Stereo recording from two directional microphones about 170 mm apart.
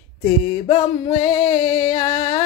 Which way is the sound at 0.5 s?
30° left (ahead or behind).